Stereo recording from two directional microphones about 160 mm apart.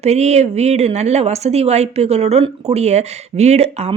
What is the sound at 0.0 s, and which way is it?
Speech, 45° right (ahead or behind).